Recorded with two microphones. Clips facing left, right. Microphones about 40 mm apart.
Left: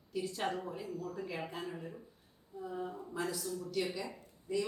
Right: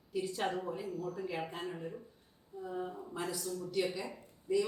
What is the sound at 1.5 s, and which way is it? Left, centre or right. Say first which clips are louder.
Speech: right 1 dB; right.